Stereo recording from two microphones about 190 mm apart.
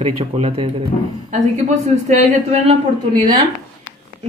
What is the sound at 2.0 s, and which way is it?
Speech, 35° right (ahead or behind).